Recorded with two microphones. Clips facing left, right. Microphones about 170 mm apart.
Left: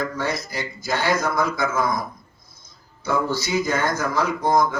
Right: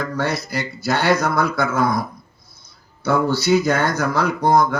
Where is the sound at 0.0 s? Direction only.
70° right (ahead or behind).